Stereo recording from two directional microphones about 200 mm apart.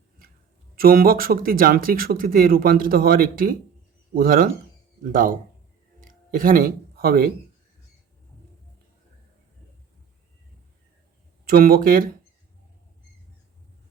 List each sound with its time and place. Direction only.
0.8 s speech: 45° right (ahead or behind)
6.0 s a sound: 45° right (ahead or behind)
11.4 s speech: 45° right (ahead or behind)